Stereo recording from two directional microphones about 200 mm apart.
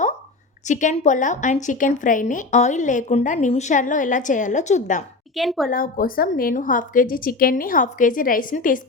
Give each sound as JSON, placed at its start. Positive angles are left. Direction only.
{"t": 0.7, "sound": "a woman's voice", "side_deg": 40}
{"t": 5.4, "sound": "a woman's voice", "side_deg": 0}
{"t": 5.7, "sound": "a woman's voice", "side_deg": 45}